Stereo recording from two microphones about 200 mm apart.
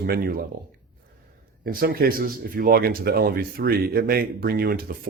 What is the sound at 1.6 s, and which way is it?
Speech, 50° right (ahead or behind).